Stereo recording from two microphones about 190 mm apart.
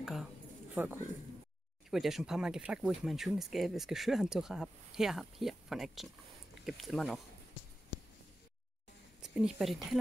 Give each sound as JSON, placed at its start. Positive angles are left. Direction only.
{"t": 0.0, "sound": "a sound", "side_deg": 0}
{"t": 0.8, "sound": "a man's voice", "side_deg": -10}
{"t": 9.2, "sound": "speech", "side_deg": -5}